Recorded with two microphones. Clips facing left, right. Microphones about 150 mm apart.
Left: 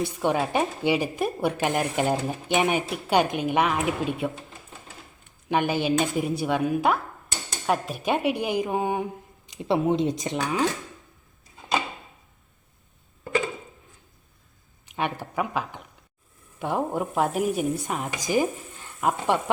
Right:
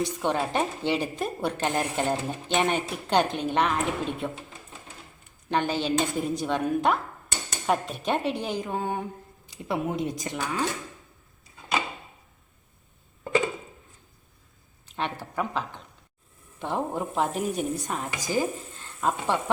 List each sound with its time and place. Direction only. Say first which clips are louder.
0.0 s a woman's voice: left 2 dB; 10° left (ahead or behind)
5.5 s a woman's voice: left 2 dB; 10° left (ahead or behind)
14.8 s a sound: left 3 dB; 10° left (ahead or behind)
16.6 s a woman's voice: left 3 dB; 10° left (ahead or behind)